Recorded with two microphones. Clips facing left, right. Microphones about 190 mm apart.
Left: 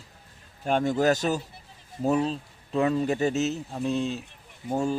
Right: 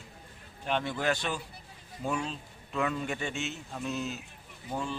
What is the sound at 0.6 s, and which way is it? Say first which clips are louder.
A man's voice: left 8 dB; 45° left (ahead or behind).